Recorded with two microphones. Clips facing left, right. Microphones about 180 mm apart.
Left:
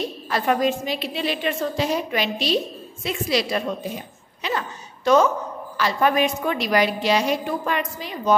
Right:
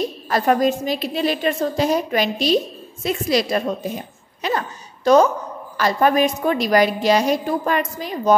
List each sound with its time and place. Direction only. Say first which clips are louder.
0.3 s a woman's voice: right 3 dB; 40° right (ahead or behind)